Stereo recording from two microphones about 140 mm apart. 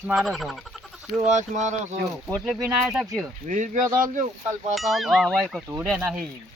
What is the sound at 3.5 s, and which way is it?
Speech, 65° right (ahead or behind).